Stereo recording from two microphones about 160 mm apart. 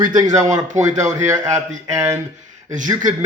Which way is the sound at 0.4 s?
50° right (ahead or behind).